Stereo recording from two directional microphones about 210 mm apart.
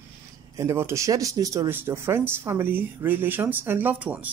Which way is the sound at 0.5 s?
15° right (ahead or behind).